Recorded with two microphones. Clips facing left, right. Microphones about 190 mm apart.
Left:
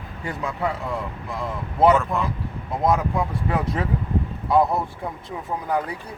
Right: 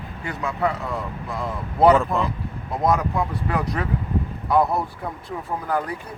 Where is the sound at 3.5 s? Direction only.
25° left (ahead or behind).